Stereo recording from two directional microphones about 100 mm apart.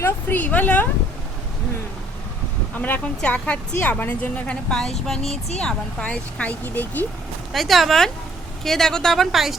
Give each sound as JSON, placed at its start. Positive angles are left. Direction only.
{"t": 0.0, "sound": "speech", "side_deg": 15}
{"t": 2.7, "sound": "speech", "side_deg": 15}
{"t": 7.5, "sound": "speech", "side_deg": 0}